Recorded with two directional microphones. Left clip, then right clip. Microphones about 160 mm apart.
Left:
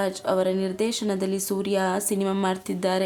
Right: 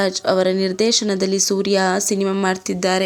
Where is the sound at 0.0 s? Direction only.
20° right (ahead or behind).